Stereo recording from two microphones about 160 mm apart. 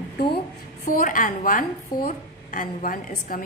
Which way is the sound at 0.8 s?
60° left (ahead or behind).